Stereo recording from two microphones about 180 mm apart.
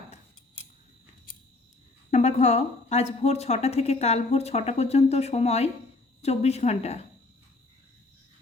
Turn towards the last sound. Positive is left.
turn(degrees=35)  # may be behind; listen again after turning